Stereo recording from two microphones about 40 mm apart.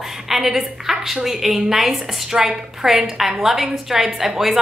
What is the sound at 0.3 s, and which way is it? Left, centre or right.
A woman's voice, centre.